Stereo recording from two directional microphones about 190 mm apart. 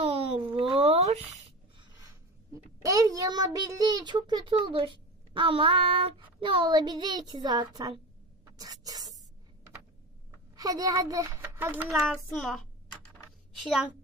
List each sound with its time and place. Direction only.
0.0 s a sound: 30° right (ahead or behind)
2.5 s a child's voice: 15° right (ahead or behind)
8.5 s spray: 20° right (ahead or behind)
10.5 s speech: 20° right (ahead or behind)
12.0 s a child's voice: centre (ahead or behind)